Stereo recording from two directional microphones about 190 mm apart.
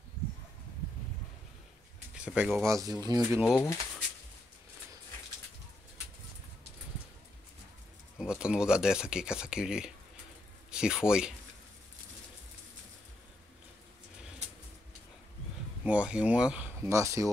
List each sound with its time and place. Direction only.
2.1 s speech: 5° right (ahead or behind)
2.7 s speech: 20° right (ahead or behind)
3.4 s speech: 15° left (ahead or behind)
8.2 s speech: 5° right (ahead or behind)
15.8 s speech: 5° right (ahead or behind)